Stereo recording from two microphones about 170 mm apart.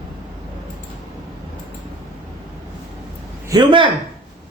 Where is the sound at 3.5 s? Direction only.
25° right (ahead or behind).